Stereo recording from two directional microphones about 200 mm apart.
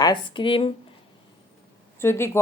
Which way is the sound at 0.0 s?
20° left (ahead or behind).